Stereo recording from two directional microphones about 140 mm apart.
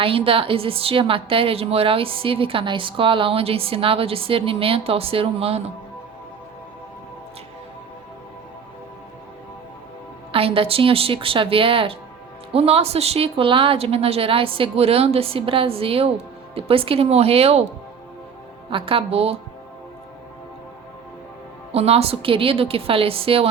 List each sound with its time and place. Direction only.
0.0 s a woman's voice: 40° right (ahead or behind)
10.3 s a woman's voice: 40° right (ahead or behind)
18.7 s a woman's voice: 40° right (ahead or behind)
21.7 s a woman's voice: 45° right (ahead or behind)